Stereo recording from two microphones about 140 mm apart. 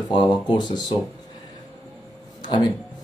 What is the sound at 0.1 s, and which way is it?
Speech, 35° left (ahead or behind).